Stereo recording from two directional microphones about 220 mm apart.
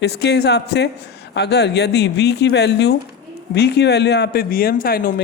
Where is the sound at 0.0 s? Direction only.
50° left (ahead or behind).